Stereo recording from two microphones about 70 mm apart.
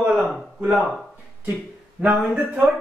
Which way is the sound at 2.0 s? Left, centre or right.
Centre.